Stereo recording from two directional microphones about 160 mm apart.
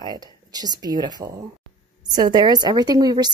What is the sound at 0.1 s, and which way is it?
Speech, 25° right (ahead or behind).